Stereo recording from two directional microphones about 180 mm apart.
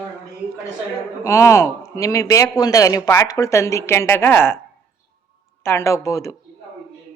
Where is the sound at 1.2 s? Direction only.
15° left (ahead or behind).